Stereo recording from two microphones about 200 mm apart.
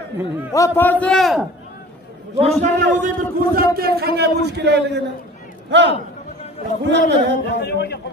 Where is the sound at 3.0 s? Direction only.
40° right (ahead or behind).